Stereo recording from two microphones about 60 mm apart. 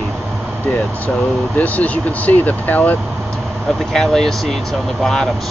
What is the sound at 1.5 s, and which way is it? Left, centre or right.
Speech, left.